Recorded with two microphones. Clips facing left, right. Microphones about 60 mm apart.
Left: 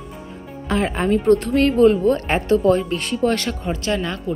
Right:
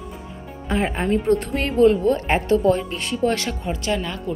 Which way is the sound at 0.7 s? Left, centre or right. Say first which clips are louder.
Left 2 dB; left.